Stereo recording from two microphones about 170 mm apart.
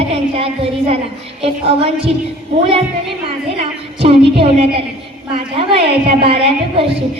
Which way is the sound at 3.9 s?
35° right (ahead or behind).